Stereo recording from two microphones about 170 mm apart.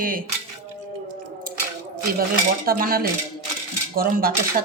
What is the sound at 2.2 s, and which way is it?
Speech, 60° right (ahead or behind).